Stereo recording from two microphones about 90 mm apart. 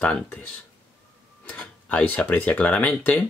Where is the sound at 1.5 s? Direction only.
15° left (ahead or behind).